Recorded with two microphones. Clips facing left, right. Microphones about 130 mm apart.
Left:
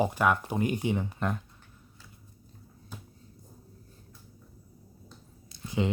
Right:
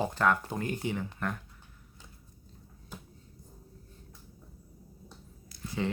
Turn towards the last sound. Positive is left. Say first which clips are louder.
# left 3 dB
turn(degrees=20)  # may be behind; listen again after turning